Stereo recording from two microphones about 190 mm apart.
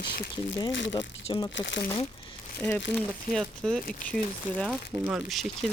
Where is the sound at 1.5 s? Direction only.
70° left (ahead or behind).